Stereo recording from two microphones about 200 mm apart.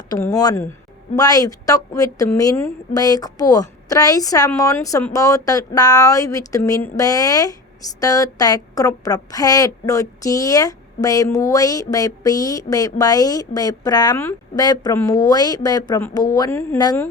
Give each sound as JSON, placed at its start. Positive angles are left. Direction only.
{"t": 0.1, "sound": "a woman's voice", "side_deg": 20}